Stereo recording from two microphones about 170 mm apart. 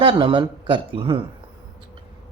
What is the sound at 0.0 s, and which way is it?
Speech, 30° right (ahead or behind).